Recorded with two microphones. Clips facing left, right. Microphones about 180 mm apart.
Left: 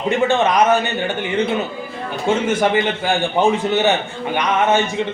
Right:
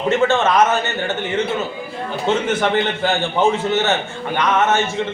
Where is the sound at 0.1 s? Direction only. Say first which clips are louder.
Even; 15° left (ahead or behind).